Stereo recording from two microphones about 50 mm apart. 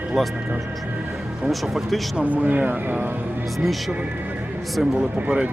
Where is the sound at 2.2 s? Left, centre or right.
Right.